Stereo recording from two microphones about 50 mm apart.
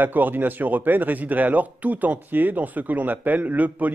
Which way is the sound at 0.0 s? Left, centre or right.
Right.